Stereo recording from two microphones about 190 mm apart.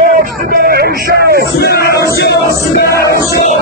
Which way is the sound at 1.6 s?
55° left (ahead or behind).